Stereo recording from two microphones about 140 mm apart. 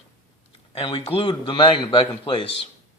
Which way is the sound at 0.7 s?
40° left (ahead or behind).